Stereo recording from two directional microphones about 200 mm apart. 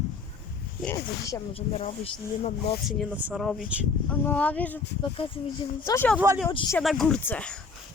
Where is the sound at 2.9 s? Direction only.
Centre (ahead or behind).